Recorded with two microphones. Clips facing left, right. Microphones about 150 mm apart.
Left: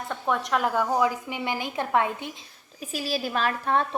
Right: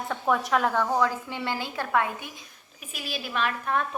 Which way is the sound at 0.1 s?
Centre (ahead or behind).